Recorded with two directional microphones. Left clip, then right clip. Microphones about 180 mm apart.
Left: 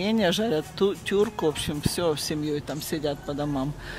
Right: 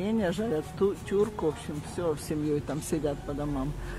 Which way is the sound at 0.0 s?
20° left (ahead or behind).